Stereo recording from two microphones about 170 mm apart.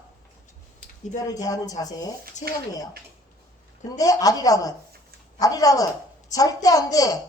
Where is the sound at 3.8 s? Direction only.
20° left (ahead or behind).